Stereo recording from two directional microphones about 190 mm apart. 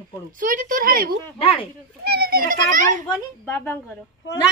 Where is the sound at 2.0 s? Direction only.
55° right (ahead or behind).